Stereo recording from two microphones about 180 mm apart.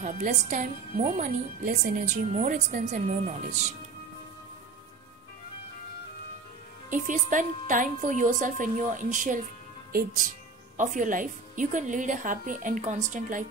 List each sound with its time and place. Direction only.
0.0 s a woman's voice: 40° right (ahead or behind)
6.9 s speech: 45° right (ahead or behind)
10.8 s speech: 45° right (ahead or behind)